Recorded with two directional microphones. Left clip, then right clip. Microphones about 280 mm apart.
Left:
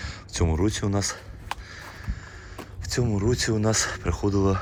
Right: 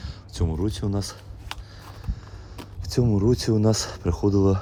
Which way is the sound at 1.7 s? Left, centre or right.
Centre.